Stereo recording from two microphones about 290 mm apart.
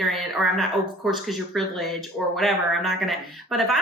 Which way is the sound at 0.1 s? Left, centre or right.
Centre.